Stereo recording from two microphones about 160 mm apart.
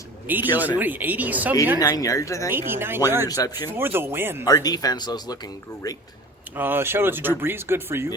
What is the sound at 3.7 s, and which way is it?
Cattle, 15° right (ahead or behind).